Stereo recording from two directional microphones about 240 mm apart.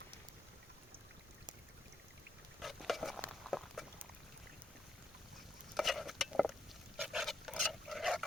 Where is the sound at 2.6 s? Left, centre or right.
Centre.